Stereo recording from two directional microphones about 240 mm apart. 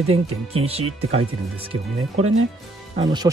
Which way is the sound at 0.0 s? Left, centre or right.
Right.